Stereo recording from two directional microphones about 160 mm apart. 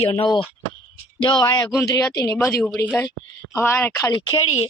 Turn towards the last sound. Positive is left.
turn(degrees=30)  # may be behind; listen again after turning